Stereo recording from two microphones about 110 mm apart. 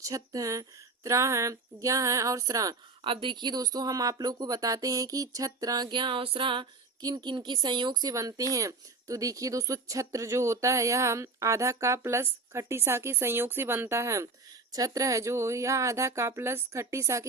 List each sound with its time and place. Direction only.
0.0 s speech: 30° right (ahead or behind)
3.0 s speech: 50° right (ahead or behind)
7.0 s speech: 40° right (ahead or behind)